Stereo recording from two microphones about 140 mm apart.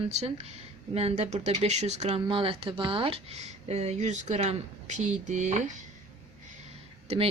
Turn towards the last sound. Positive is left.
turn(degrees=-45)  # may be behind; listen again after turning